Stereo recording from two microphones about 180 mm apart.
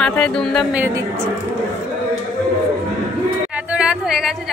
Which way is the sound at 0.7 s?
15° right (ahead or behind).